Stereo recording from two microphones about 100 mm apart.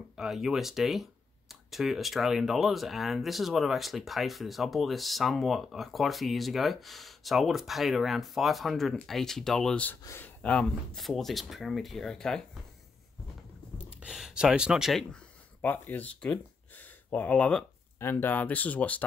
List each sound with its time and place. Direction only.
0.1 s speech: 5° right (ahead or behind)
13.7 s speech: 15° right (ahead or behind)
15.6 s speech: 15° left (ahead or behind)
17.9 s speech: 20° left (ahead or behind)